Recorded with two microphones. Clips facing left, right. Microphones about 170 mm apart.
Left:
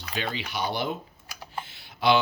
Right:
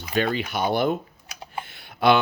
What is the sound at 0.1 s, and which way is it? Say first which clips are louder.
Speech: right 8 dB; 50° right (ahead or behind).